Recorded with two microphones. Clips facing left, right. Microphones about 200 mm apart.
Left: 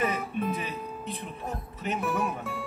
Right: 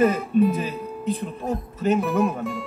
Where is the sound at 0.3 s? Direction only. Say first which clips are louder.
Right 17 dB; 40° right (ahead or behind).